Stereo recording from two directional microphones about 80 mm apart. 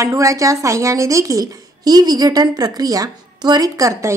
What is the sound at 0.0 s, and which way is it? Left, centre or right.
A woman's voice, right.